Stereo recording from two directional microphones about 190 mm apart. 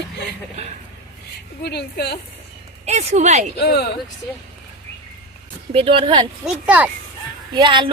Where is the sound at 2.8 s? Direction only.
35° right (ahead or behind).